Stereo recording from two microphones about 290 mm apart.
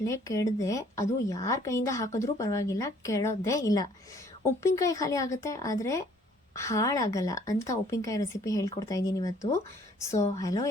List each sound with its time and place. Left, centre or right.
0.0 s a woman's voice: centre